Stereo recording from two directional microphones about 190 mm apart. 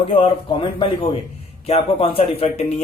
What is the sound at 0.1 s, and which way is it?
A man's voice, 25° left (ahead or behind).